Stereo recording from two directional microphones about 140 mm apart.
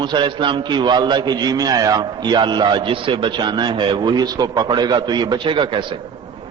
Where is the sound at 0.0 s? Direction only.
35° right (ahead or behind).